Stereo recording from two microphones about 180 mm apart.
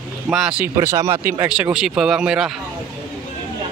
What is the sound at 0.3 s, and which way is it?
Speech, 5° right (ahead or behind).